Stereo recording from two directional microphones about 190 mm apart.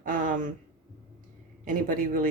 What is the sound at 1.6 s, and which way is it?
Speech, 45° right (ahead or behind).